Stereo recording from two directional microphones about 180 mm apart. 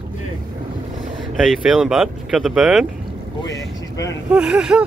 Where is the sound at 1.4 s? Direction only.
Centre (ahead or behind).